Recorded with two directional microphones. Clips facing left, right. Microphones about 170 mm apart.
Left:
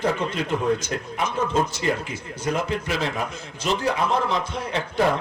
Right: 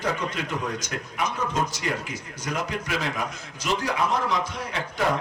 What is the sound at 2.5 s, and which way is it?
A man's voice, 30° left (ahead or behind).